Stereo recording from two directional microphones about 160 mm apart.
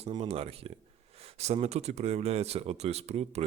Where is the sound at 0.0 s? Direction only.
35° right (ahead or behind).